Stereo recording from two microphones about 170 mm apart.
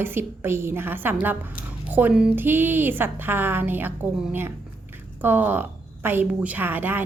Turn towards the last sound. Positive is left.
turn(degrees=-10)  # may be behind; listen again after turning